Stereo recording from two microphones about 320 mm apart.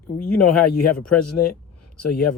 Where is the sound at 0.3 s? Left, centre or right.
Left.